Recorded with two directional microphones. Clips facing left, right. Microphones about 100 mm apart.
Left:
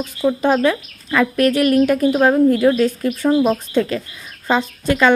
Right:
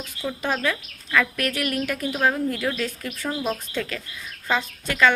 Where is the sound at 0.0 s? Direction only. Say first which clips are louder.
Left 11 dB; 35° left (ahead or behind).